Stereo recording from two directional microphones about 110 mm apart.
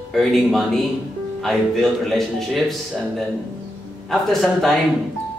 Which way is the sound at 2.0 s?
5° left (ahead or behind).